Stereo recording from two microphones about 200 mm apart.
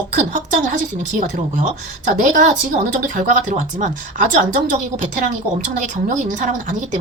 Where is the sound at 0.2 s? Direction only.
40° right (ahead or behind).